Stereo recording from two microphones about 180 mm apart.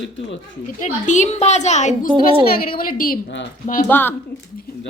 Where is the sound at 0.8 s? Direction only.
40° left (ahead or behind).